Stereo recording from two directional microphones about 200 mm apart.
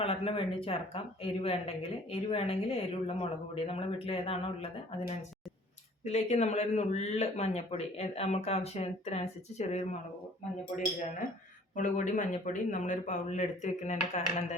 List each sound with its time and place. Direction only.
0.0 s speech: 25° left (ahead or behind)
6.1 s speech: 35° left (ahead or behind)
11.8 s speech: 40° left (ahead or behind)